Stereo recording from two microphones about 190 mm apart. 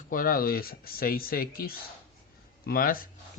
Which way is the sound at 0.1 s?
50° left (ahead or behind).